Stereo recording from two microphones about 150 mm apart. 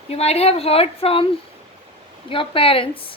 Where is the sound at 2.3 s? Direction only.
35° left (ahead or behind).